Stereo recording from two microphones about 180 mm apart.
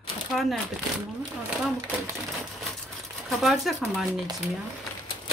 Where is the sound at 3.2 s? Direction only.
Centre (ahead or behind).